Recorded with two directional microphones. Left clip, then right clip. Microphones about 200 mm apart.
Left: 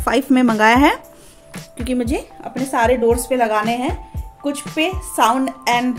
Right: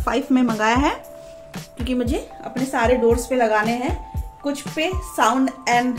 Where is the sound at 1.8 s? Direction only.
35° left (ahead or behind).